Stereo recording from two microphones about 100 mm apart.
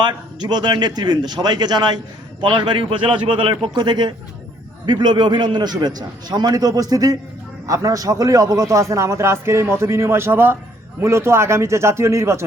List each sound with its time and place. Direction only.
0.0 s a man's voice: 50° right (ahead or behind); by 12.5 s 30° right (ahead or behind)